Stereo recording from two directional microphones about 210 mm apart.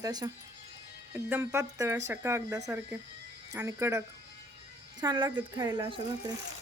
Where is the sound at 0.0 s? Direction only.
20° right (ahead or behind).